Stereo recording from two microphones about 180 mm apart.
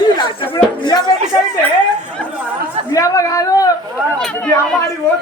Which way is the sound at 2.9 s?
20° left (ahead or behind).